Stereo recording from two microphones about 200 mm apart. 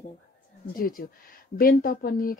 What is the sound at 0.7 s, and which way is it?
Speech, 45° left (ahead or behind).